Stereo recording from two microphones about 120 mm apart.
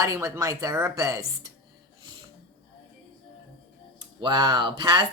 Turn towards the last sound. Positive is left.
turn(degrees=-40)  # may be behind; listen again after turning